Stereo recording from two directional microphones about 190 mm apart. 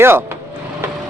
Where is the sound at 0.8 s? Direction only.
15° right (ahead or behind).